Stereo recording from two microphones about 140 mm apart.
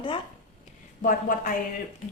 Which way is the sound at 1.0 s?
80° left.